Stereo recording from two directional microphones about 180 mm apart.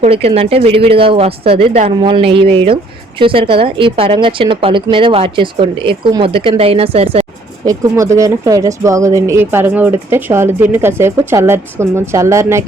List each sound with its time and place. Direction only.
0.0 s a woman's voice: 35° right (ahead or behind)
7.7 s speech: 15° right (ahead or behind)